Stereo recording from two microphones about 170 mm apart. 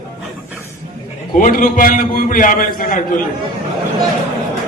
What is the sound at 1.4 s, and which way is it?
A man's voice, 50° left (ahead or behind).